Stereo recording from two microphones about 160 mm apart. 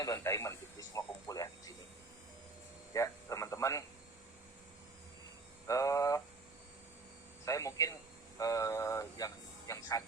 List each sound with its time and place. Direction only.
0.0 s speech: 20° left (ahead or behind)
2.9 s speech: 20° left (ahead or behind)
5.6 s hum: 20° left (ahead or behind)
7.4 s a sound: 20° left (ahead or behind)